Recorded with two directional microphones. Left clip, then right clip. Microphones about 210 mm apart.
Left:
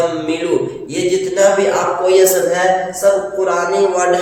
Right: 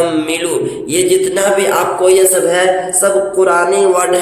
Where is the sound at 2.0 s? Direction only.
40° right (ahead or behind).